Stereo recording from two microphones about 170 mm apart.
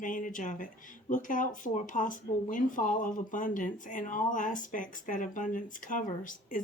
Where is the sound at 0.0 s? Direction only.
50° left (ahead or behind).